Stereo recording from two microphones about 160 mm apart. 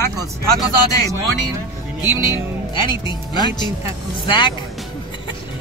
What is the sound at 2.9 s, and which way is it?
Speech, 25° left (ahead or behind).